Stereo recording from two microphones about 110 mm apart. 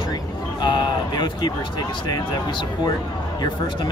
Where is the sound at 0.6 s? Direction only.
40° left (ahead or behind).